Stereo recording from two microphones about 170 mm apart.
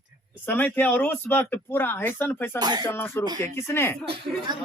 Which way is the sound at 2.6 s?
25° right (ahead or behind).